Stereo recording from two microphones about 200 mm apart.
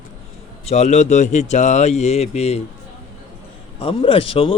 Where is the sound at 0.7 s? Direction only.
35° left (ahead or behind).